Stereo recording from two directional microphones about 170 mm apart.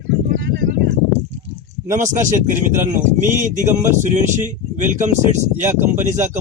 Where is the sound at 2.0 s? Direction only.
45° right (ahead or behind).